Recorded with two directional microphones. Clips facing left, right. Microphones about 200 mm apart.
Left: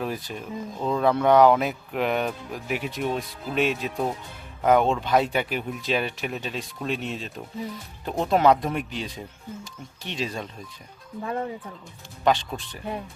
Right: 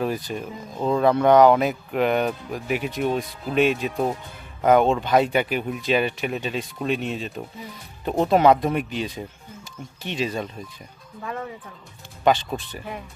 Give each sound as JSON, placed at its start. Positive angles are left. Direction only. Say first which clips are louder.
{"t": 0.0, "sound": "speech", "louder": "right 4 dB", "side_deg": 0}
{"t": 11.2, "sound": "speech", "louder": "left 3 dB", "side_deg": 30}
{"t": 12.2, "sound": "speech", "louder": "right 3 dB", "side_deg": 0}